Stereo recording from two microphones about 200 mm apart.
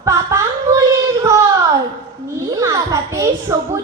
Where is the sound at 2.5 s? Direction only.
15° right (ahead or behind).